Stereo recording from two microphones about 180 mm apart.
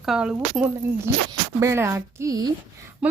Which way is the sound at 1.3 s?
15° right (ahead or behind).